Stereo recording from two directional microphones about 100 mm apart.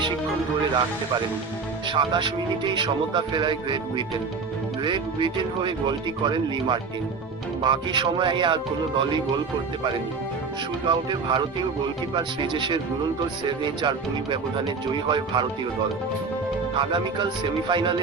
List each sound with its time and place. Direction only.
1.9 s a man's voice: 55° right (ahead or behind)
10.8 s a man's voice: 50° right (ahead or behind)
16.7 s a man's voice: 50° right (ahead or behind)